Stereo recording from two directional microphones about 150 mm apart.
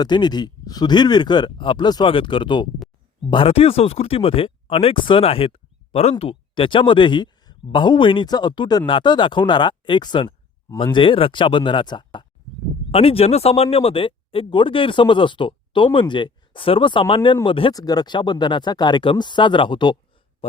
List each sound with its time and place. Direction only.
0.0 s speech: 30° left (ahead or behind)